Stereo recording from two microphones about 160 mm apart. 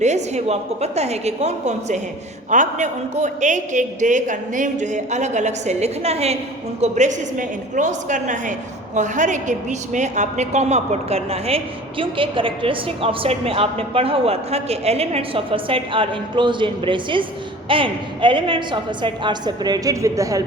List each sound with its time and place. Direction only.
0.0 s a man's voice: 45° right (ahead or behind); by 20.4 s 20° right (ahead or behind)